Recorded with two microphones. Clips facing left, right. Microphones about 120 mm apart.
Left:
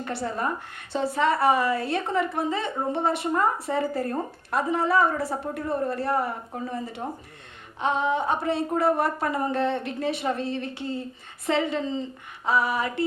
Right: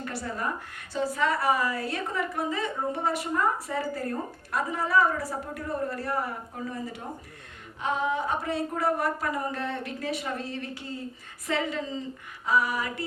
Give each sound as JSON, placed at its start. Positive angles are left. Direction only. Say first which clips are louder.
{"t": 0.0, "sound": "a woman's voice", "louder": "left 4 dB", "side_deg": 25}
{"t": 3.7, "sound": "speech", "louder": "left 5 dB", "side_deg": 40}
{"t": 4.5, "sound": "a woman's voice", "louder": "left 3 dB", "side_deg": 25}